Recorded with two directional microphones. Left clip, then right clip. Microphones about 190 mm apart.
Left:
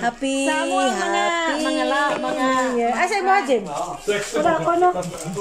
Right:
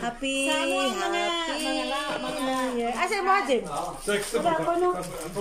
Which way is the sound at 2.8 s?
5° right (ahead or behind).